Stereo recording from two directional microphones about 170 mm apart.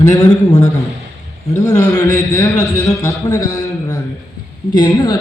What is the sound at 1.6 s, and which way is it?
A man's voice, 20° left (ahead or behind).